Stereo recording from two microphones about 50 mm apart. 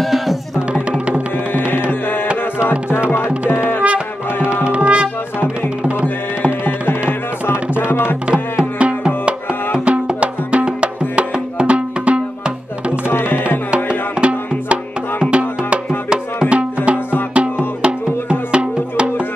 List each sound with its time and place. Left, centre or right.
0.0 s music: centre
0.7 s music: right
1.9 s music: left
2.6 s music: left
4.6 s music: right
6.6 s music: left
8.3 s music: right
13.1 s music: left
13.7 s music: centre